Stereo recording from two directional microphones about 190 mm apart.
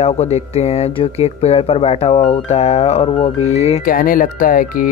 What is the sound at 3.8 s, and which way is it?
Speech, 45° left (ahead or behind).